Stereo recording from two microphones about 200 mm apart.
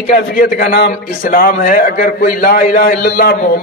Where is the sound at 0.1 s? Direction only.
45° left (ahead or behind).